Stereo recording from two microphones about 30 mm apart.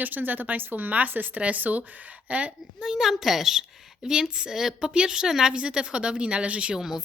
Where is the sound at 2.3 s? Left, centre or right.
Right.